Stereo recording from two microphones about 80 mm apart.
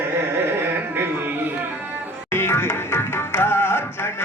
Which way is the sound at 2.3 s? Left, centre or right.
Left.